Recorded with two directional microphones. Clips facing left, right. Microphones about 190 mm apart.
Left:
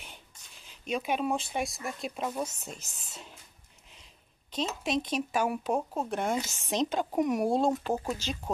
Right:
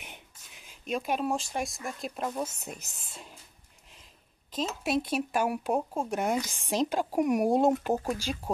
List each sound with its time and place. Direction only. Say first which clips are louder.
0.7 s speech: even; centre (ahead or behind)
4.5 s speech: right 1 dB; 5° right (ahead or behind)